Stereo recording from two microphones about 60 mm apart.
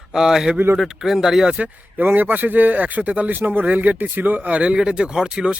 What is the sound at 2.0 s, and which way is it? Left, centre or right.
Speech, right.